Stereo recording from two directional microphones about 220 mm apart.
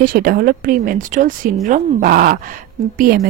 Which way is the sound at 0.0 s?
40° right (ahead or behind).